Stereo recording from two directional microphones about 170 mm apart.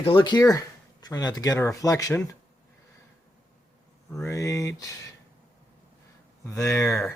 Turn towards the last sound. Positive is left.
turn(degrees=0)  # may be behind; listen again after turning